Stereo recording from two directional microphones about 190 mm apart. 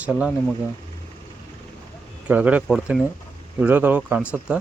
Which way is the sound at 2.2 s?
5° right (ahead or behind).